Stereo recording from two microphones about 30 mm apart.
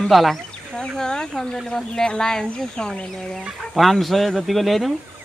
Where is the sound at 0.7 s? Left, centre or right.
Left.